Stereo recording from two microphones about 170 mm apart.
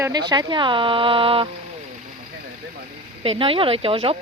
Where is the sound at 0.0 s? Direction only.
25° right (ahead or behind).